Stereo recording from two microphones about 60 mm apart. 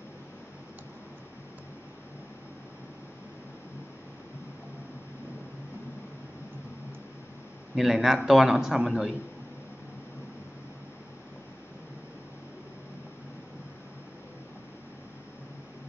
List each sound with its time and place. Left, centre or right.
7.7 s a man's voice: centre